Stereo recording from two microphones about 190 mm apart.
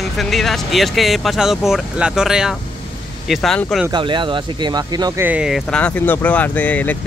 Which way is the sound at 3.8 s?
25° right (ahead or behind).